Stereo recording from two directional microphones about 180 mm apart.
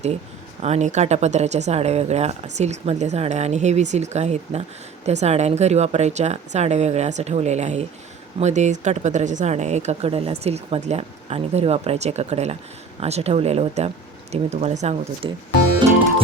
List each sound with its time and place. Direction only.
0.6 s speech: 40° right (ahead or behind)